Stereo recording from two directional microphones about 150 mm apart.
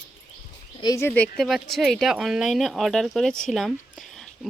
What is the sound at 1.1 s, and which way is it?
Speech, 5° left (ahead or behind).